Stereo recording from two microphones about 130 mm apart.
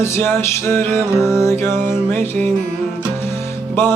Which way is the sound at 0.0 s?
20° left (ahead or behind).